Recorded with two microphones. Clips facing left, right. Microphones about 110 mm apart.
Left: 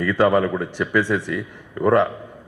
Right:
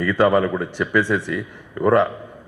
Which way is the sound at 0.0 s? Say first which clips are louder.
Right 1 dB; 25° right (ahead or behind).